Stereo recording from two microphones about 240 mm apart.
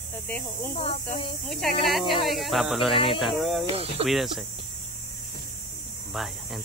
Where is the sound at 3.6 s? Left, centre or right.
Right.